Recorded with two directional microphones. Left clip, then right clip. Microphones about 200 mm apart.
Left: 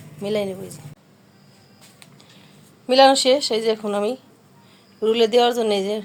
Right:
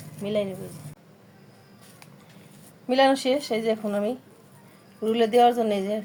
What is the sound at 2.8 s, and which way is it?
A woman's voice, 35° left (ahead or behind).